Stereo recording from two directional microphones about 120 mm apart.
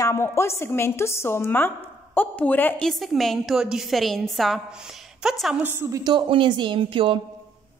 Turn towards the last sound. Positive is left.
turn(degrees=-45)  # may be behind; listen again after turning